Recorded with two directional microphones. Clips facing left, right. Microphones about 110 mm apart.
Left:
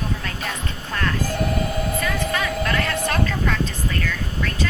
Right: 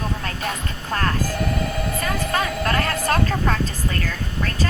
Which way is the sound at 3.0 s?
40° right (ahead or behind).